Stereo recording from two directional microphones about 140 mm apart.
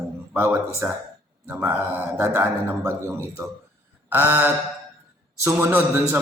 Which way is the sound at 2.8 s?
20° right (ahead or behind).